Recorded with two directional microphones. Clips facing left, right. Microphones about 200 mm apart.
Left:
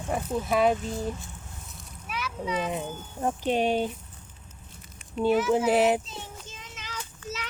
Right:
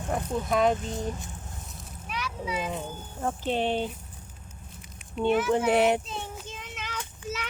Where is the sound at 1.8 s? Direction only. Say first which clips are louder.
Even; centre (ahead or behind).